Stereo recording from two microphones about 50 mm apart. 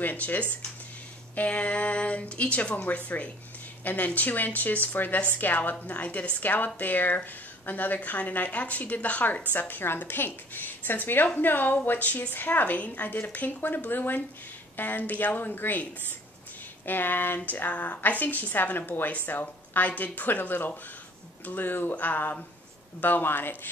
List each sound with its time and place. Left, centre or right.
0.0 s a woman's voice: left
17.4 s a woman's voice: left